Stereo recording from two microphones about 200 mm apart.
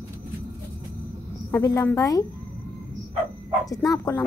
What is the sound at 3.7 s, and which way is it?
Speech, 15° left (ahead or behind).